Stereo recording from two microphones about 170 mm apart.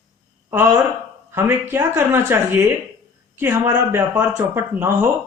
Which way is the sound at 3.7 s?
15° right (ahead or behind).